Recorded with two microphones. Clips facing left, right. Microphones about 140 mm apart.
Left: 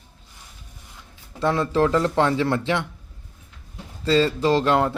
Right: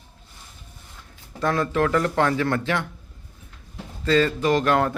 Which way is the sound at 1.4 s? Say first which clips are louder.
Left 2 dB; 25° left (ahead or behind).